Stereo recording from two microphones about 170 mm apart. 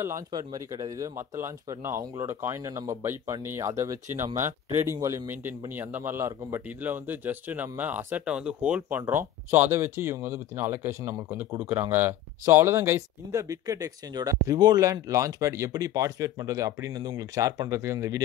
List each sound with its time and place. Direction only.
0.0 s speech: 20° right (ahead or behind)